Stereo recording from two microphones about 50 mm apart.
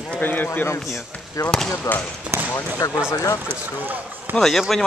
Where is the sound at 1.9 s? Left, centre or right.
Left.